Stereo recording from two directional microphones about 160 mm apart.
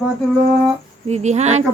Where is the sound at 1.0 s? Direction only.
45° right (ahead or behind).